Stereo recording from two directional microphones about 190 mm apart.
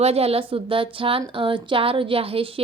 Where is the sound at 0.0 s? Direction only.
30° right (ahead or behind).